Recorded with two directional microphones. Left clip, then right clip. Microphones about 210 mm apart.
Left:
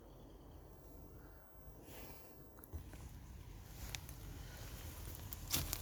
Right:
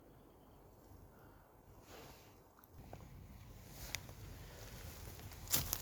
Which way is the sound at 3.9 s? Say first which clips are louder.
Right 3 dB; 50° right (ahead or behind).